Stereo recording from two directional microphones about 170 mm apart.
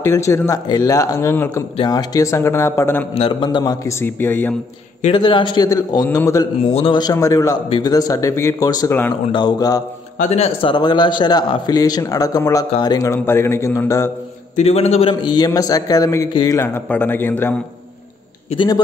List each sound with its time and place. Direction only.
0.0 s speech: 15° left (ahead or behind)
3.2 s a man's voice: 30° left (ahead or behind); by 4.6 s 10° left (ahead or behind)
5.1 s a man's voice: 30° left (ahead or behind)
6.7 s a man's voice: 30° left (ahead or behind)
10.3 s a man's voice: 35° left (ahead or behind); by 14.1 s 15° left (ahead or behind)
14.5 s a man's voice: 40° left (ahead or behind); by 17.6 s 10° left (ahead or behind)